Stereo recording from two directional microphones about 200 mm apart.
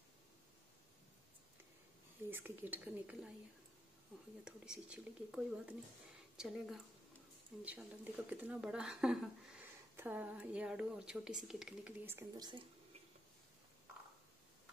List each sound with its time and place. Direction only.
2.3 s speech: 10° right (ahead or behind)
4.5 s a woman's voice: 5° right (ahead or behind); by 12.6 s 20° right (ahead or behind)